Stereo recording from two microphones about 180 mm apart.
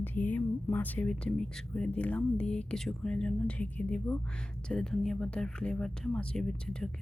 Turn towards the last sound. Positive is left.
turn(degrees=5)  # may be behind; listen again after turning